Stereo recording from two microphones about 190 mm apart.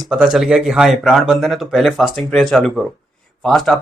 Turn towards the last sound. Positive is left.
turn(degrees=0)  # may be behind; listen again after turning